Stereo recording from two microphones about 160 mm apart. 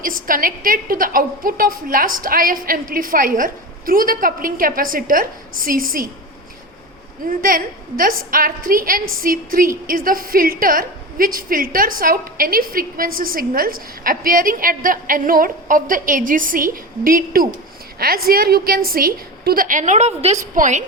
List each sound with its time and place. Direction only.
0.0 s a woman's voice: 60° right (ahead or behind)
7.3 s a woman's voice: 60° right (ahead or behind)